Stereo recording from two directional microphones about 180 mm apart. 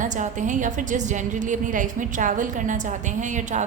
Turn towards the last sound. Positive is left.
turn(degrees=-45)  # may be behind; listen again after turning